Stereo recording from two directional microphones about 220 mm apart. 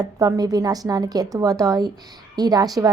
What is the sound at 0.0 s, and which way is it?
A woman's voice, 15° right (ahead or behind).